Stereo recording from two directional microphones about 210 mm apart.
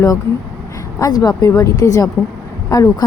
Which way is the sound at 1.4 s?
15° left (ahead or behind).